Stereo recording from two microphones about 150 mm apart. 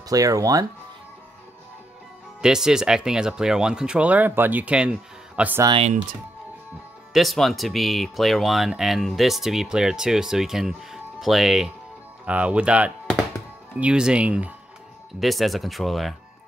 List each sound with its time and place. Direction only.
0.1 s speech: 25° right (ahead or behind)
2.4 s speech: 5° right (ahead or behind)
5.8 s speech: 50° right (ahead or behind)
7.2 s speech: centre (ahead or behind)